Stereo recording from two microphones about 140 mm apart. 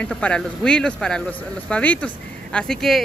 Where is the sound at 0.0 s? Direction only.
10° left (ahead or behind).